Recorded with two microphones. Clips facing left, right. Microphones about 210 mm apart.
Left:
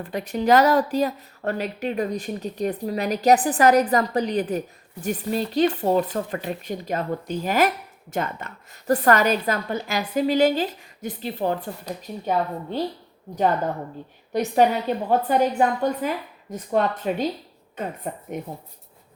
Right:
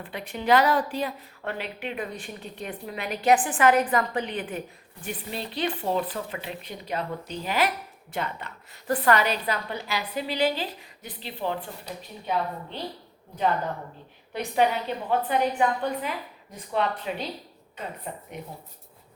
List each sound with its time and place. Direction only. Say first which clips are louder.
0.0 s a woman's voice: left 7 dB; 40° left (ahead or behind)
14.3 s a woman's voice: left 5 dB; 45° left (ahead or behind)